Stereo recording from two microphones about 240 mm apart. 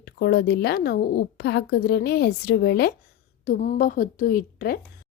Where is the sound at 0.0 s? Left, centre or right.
Left.